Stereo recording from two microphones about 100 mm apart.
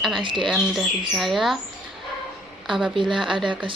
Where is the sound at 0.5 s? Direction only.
Centre (ahead or behind).